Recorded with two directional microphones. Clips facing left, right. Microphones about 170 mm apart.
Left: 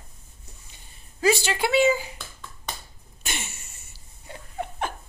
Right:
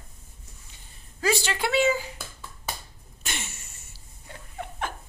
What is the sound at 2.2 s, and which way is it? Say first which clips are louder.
Finger snapping: right 1 dB; 5° right (ahead or behind).